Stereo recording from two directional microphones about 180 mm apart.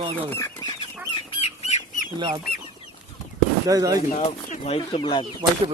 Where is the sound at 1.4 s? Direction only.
40° left (ahead or behind).